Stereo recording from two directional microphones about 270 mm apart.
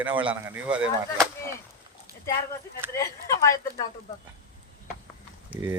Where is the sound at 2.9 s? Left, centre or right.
Centre.